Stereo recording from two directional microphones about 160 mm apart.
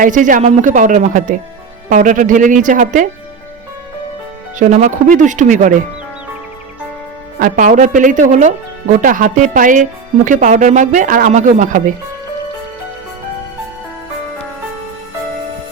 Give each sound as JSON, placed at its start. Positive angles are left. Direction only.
{"t": 0.0, "sound": "speech", "side_deg": -55}
{"t": 4.5, "sound": "speech", "side_deg": -50}
{"t": 7.3, "sound": "speech", "side_deg": -60}